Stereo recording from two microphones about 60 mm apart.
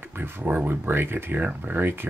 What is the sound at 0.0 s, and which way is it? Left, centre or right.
Speech, right.